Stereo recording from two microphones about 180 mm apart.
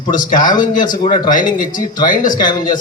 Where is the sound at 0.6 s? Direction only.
45° left (ahead or behind).